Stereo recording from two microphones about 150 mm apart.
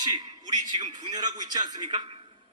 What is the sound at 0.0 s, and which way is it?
Speech, 30° right (ahead or behind).